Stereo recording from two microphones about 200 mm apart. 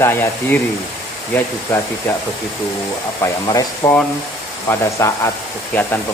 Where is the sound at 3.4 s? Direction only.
20° left (ahead or behind).